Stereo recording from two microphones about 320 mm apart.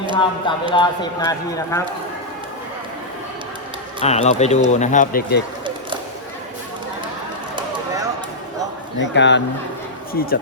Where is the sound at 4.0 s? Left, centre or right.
Left.